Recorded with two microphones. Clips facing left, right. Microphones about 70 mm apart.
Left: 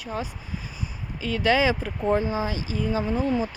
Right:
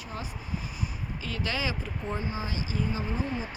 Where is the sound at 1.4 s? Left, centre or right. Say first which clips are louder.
Left 12 dB; left.